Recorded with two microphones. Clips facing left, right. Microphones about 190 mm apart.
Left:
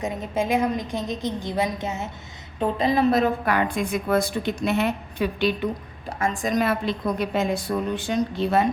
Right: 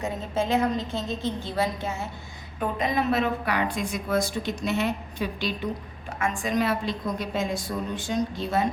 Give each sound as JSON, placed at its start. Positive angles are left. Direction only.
{"t": 0.0, "sound": "a woman's voice", "side_deg": 15}
{"t": 2.6, "sound": "a woman's voice", "side_deg": 30}
{"t": 6.1, "sound": "a woman's voice", "side_deg": 35}